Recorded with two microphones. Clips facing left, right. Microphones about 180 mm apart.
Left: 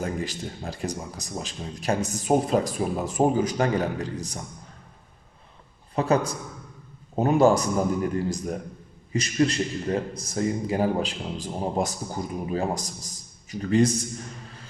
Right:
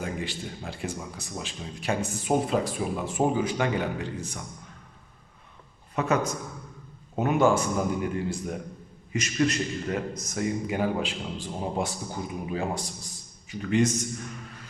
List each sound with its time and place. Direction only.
0.0 s speech: 40° left (ahead or behind)
6.0 s speech: 35° left (ahead or behind)
9.1 s a man's voice: 35° left (ahead or behind)